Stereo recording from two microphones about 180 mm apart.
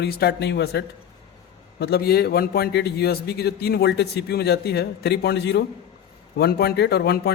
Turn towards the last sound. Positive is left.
turn(degrees=65)  # may be behind; listen again after turning